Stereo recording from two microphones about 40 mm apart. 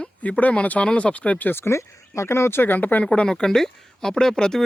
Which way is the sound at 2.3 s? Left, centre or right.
Left.